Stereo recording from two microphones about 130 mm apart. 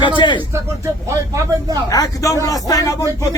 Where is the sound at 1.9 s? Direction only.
25° left (ahead or behind).